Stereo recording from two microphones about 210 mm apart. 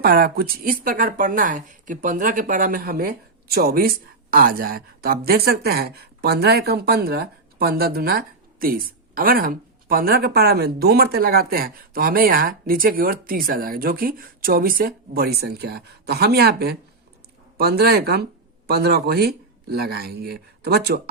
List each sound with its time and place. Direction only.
0.0 s speech: 45° right (ahead or behind)